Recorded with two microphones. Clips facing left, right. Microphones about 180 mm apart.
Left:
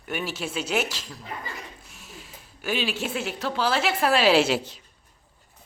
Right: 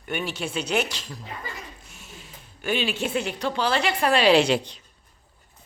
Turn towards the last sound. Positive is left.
turn(degrees=5)  # may be behind; listen again after turning